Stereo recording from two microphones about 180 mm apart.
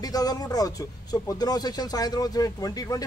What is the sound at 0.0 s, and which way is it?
A man's voice, 20° left (ahead or behind).